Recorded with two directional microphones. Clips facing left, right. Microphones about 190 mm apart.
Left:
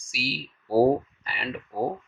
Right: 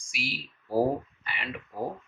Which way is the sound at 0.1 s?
35° left (ahead or behind).